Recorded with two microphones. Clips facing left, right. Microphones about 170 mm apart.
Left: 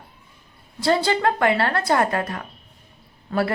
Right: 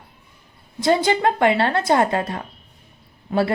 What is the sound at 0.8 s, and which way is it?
A woman's voice, 20° right (ahead or behind).